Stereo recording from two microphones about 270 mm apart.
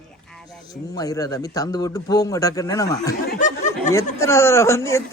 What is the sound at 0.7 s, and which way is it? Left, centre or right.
A man's voice, centre.